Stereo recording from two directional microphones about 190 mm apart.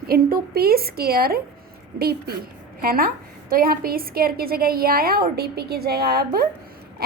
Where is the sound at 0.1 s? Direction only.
55° right (ahead or behind).